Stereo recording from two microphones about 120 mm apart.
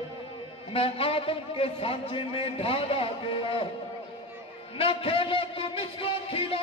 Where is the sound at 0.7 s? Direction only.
50° left (ahead or behind).